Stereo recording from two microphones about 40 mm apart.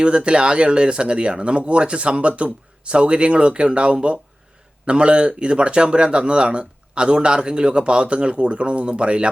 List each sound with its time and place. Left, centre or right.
0.0 s speech: right